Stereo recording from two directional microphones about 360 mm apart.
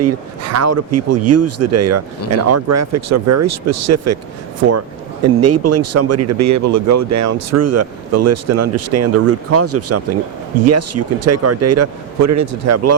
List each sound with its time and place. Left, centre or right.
0.0 s speech: right
5.3 s speech: right